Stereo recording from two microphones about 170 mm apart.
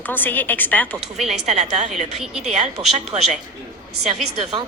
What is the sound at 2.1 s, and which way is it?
Speech, centre (ahead or behind).